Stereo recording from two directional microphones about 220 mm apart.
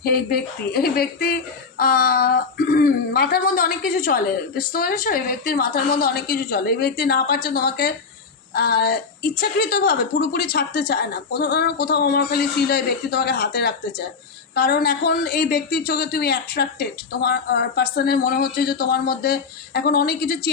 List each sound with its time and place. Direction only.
0.0 s speech: 45° left (ahead or behind)